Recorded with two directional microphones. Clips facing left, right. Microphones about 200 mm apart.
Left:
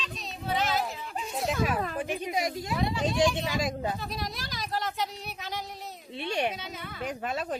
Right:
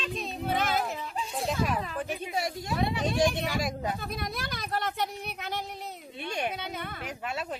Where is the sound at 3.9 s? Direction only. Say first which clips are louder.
Right 1 dB; 55° right (ahead or behind).